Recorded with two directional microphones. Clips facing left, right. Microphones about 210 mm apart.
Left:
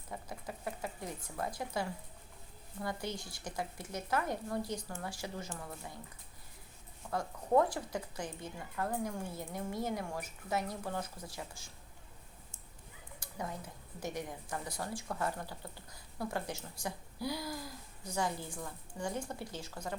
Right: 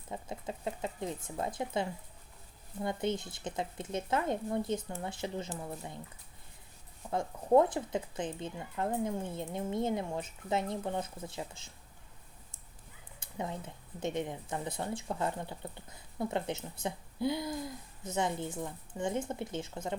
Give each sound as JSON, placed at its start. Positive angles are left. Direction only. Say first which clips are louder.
{"t": 0.1, "sound": "speech", "louder": "right 4 dB", "side_deg": -25}
{"t": 7.1, "sound": "speech", "louder": "right 4 dB", "side_deg": -20}
{"t": 13.1, "sound": "speech", "louder": "right 3 dB", "side_deg": -25}